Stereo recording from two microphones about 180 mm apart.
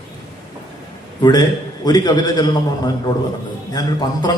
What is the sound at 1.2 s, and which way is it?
A man's voice, 20° left (ahead or behind).